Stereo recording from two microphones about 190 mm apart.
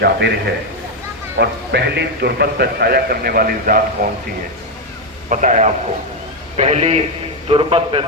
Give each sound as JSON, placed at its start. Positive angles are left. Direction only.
{"t": 0.0, "sound": "a man's voice", "side_deg": -60}
{"t": 5.3, "sound": "a man's voice", "side_deg": -40}